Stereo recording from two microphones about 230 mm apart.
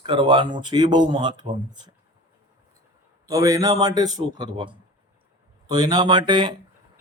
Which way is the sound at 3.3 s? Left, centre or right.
Centre.